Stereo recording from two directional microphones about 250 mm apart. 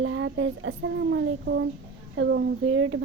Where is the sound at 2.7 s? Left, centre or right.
Right.